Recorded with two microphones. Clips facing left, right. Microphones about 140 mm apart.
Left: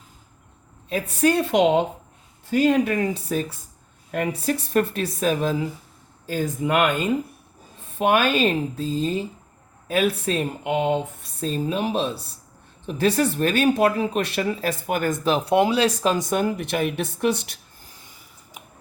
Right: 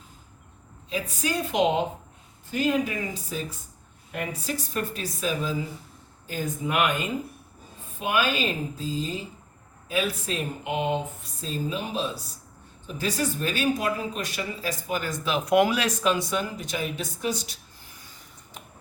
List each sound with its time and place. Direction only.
0.9 s speech: 60° left (ahead or behind)
6.7 s speech: 65° left (ahead or behind)
7.9 s speech: 65° left (ahead or behind)